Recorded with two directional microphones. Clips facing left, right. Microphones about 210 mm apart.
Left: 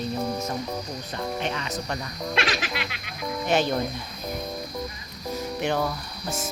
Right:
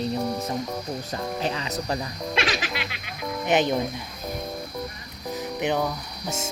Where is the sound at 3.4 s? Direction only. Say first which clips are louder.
Right 2 dB; 20° right (ahead or behind).